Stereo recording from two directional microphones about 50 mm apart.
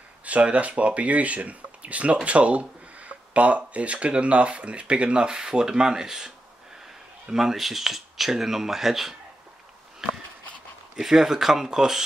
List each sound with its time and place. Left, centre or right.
0.2 s speech: right; by 9.1 s centre
11.0 s speech: centre